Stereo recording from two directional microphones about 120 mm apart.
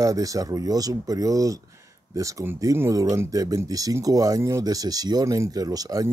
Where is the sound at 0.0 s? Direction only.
30° right (ahead or behind).